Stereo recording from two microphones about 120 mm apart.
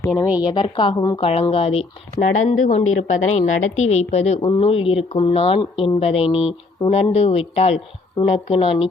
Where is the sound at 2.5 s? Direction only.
80° left.